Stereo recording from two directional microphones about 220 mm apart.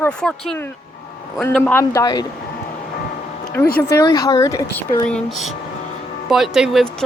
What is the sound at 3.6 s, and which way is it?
A man's voice, 10° left (ahead or behind).